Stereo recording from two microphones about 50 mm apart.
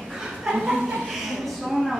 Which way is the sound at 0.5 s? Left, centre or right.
Centre.